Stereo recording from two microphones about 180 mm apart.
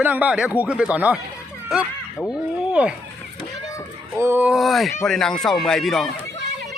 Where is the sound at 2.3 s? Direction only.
5° right (ahead or behind).